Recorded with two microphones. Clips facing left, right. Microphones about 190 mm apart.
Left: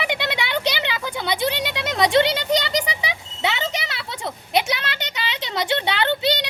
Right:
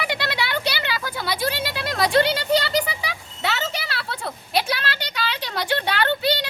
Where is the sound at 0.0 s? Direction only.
20° left (ahead or behind).